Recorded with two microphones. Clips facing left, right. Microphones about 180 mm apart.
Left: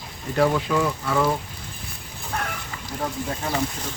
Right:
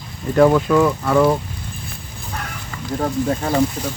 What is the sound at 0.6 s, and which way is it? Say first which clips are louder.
Speech: right 8 dB; 55° right (ahead or behind).